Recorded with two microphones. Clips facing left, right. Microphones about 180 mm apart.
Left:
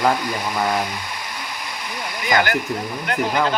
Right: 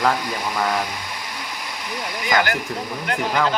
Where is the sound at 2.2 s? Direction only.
55° left (ahead or behind).